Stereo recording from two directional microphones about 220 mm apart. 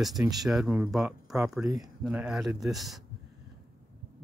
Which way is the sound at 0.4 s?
Centre (ahead or behind).